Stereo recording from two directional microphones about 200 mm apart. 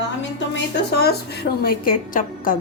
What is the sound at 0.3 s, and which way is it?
A woman's voice, 60° left (ahead or behind).